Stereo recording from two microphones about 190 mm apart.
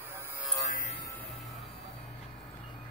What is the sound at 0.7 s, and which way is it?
Music, 45° left (ahead or behind).